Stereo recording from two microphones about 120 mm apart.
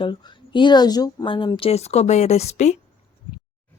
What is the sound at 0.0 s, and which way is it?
Speech, 40° left (ahead or behind).